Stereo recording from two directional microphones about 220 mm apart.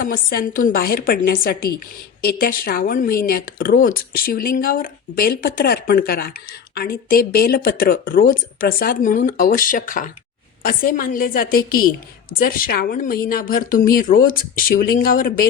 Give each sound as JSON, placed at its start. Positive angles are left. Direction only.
{"t": 0.0, "sound": "a woman's voice", "side_deg": 40}